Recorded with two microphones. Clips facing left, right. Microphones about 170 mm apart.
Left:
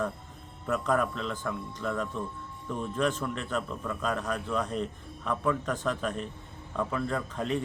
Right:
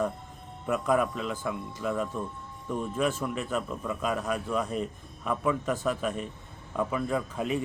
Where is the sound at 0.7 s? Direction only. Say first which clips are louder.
Right 2 dB; 10° right (ahead or behind).